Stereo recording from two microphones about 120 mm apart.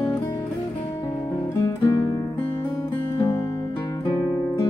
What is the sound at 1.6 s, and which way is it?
Music, 25° left (ahead or behind).